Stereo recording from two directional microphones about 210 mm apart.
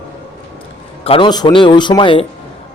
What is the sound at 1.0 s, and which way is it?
A man's voice, 25° left (ahead or behind).